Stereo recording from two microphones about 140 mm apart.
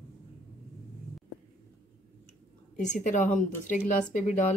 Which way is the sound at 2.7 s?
60° left (ahead or behind).